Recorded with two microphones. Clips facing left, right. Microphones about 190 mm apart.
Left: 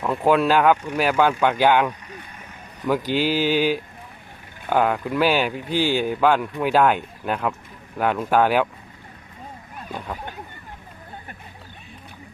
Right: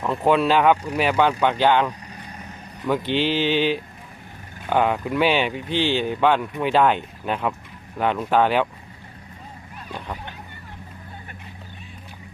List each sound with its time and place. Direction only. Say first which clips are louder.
0.0 s speech: left 1 dB; centre (ahead or behind)
3.1 s speech: even; 5° left (ahead or behind)